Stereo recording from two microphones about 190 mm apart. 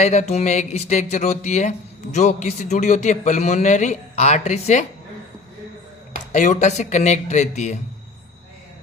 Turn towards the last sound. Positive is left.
turn(degrees=40)  # may be behind; listen again after turning